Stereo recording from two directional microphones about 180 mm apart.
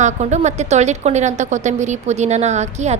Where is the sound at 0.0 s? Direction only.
40° right (ahead or behind).